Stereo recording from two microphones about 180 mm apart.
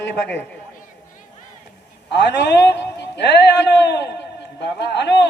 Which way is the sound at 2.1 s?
70° left (ahead or behind).